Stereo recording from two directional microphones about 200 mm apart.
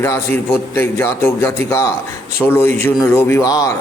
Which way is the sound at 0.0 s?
10° left (ahead or behind).